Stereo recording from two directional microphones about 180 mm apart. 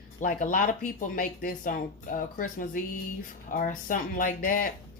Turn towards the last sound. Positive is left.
turn(degrees=50)  # may be behind; listen again after turning